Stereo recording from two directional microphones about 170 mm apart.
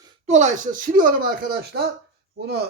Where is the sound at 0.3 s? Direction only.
45° right (ahead or behind).